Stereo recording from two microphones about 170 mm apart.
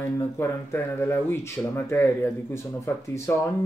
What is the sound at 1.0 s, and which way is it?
Speech, 15° left (ahead or behind).